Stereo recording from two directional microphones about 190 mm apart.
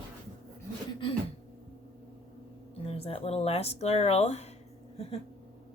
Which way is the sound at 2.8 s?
30° left (ahead or behind).